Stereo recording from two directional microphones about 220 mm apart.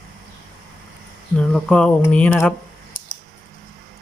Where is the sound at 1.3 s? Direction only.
5° left (ahead or behind).